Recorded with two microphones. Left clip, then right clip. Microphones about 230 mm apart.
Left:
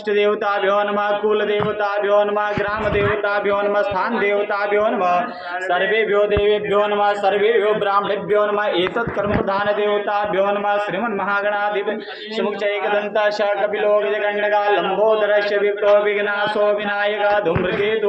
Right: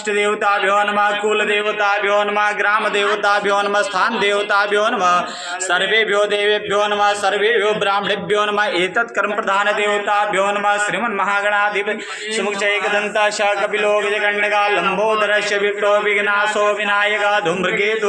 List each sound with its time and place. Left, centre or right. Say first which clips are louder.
0.7 s a man's voice: right 2 dB; right
2.9 s a man's voice: right 3 dB; centre
4.7 s speech: right 2 dB; right
5.7 s a man's voice: right 2 dB; centre
6.7 s a man's voice: right 1 dB; right
7.9 s a man's voice: even; centre
8.5 s a man's voice: right 2 dB; right
9.5 s a man's voice: right 4 dB; centre
15.6 s a man's voice: left 1 dB; centre